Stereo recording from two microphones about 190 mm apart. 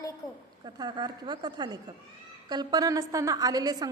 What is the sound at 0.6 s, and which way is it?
A woman's voice, 20° right (ahead or behind).